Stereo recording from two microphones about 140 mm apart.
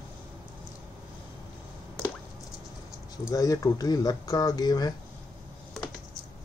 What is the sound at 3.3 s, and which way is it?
Speech, 25° left (ahead or behind).